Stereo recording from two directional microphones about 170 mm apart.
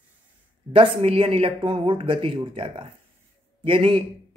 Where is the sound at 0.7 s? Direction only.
35° right (ahead or behind).